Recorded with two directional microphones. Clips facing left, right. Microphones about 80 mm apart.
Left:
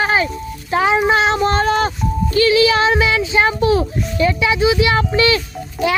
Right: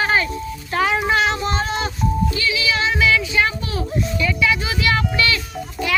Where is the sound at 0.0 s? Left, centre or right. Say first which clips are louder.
Left 2 dB; centre.